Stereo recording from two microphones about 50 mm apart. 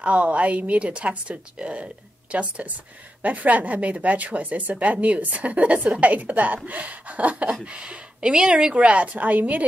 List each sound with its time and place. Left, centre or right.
0.0 s a woman's voice: right